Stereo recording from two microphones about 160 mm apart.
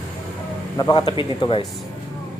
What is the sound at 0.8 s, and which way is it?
Speech, 25° left (ahead or behind).